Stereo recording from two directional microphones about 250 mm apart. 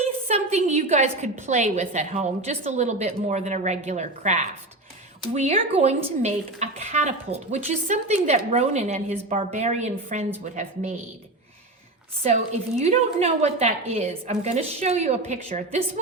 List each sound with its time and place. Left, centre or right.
0.3 s speech: right
12.8 s speech: right